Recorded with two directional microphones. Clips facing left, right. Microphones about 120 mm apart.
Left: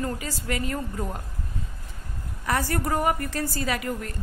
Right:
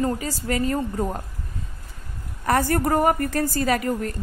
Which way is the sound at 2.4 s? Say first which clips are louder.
Right 6 dB; 45° right (ahead or behind).